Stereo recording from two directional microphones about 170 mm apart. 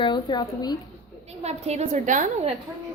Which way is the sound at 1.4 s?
40° right (ahead or behind).